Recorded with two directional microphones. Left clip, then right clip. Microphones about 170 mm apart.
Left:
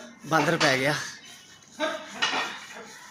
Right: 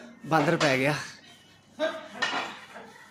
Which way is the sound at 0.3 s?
35° right (ahead or behind).